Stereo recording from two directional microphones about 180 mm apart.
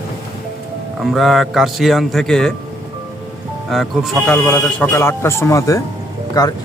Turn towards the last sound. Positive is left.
turn(degrees=20)  # may be behind; listen again after turning